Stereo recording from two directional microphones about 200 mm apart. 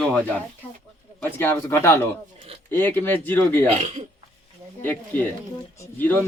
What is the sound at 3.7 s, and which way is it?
Speech, 30° right (ahead or behind).